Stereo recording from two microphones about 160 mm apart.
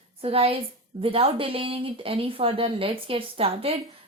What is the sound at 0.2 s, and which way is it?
A woman's voice, 35° right (ahead or behind).